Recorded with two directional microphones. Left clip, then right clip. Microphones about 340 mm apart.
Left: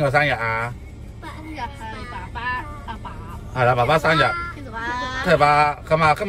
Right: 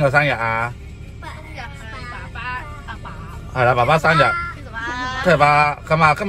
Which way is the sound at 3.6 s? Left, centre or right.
Centre.